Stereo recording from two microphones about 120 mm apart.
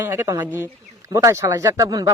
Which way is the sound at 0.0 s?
25° right (ahead or behind).